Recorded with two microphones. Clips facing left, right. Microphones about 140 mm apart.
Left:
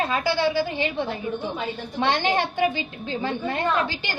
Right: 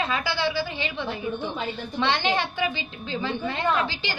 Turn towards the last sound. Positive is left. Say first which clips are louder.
# left 1 dB
turn(degrees=50)  # may be behind; listen again after turning